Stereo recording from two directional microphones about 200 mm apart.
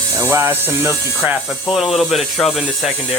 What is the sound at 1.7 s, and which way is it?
Speech, centre (ahead or behind).